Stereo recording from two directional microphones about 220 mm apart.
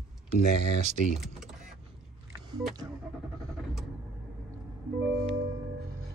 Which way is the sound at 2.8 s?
15° right (ahead or behind).